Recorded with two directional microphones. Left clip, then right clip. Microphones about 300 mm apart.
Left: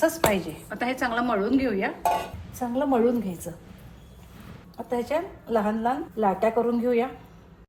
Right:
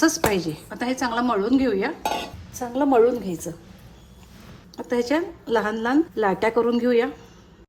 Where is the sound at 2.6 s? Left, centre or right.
Right.